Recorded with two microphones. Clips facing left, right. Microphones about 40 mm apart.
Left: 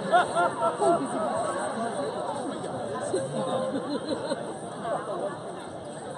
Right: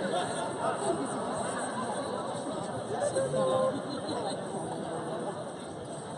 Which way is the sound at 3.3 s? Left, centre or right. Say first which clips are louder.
Right 1 dB; centre.